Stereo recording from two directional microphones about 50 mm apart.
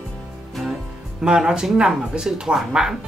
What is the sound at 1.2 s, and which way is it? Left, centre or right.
Speech, centre.